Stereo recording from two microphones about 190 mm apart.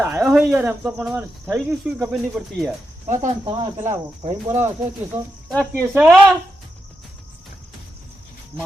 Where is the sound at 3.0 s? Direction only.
40° right (ahead or behind).